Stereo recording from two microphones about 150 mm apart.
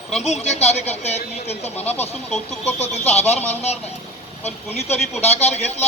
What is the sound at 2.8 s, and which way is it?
A man's voice, 45° left (ahead or behind).